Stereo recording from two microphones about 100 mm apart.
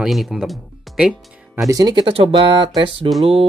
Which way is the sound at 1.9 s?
60° right (ahead or behind).